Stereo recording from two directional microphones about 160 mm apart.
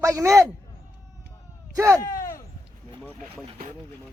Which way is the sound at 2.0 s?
20° left (ahead or behind).